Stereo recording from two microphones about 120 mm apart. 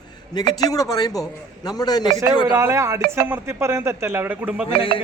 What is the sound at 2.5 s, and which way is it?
Speech, 25° right (ahead or behind).